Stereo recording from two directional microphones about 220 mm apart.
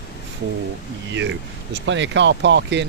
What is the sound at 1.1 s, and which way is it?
Speech, 55° right (ahead or behind).